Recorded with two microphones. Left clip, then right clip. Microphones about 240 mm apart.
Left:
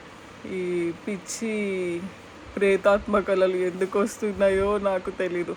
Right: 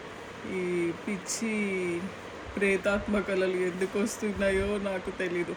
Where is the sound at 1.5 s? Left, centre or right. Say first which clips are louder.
Left 4 dB; left.